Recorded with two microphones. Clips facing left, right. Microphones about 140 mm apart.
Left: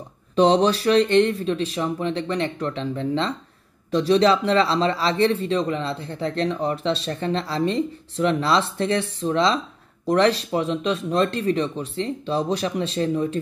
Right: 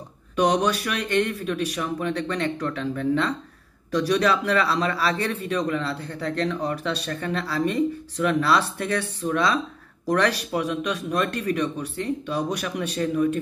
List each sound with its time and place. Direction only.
0.4 s speech: 30° left (ahead or behind)